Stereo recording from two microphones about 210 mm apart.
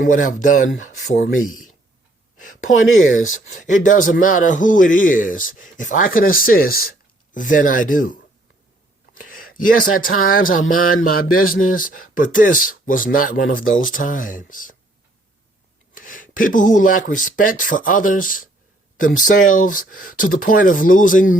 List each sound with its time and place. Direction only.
0.0 s a man's voice: 40° left (ahead or behind)
2.6 s speech: 70° left (ahead or behind)
3.5 s a man's voice: 40° left (ahead or behind)
9.1 s a sound: 40° left (ahead or behind)
10.3 s a man's voice: 40° left (ahead or behind)
16.0 s a man's voice: 40° left (ahead or behind)